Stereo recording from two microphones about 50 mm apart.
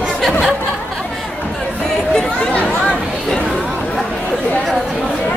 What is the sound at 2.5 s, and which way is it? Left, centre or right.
Chatter, left.